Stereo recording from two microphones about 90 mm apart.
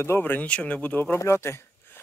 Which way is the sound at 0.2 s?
20° left (ahead or behind).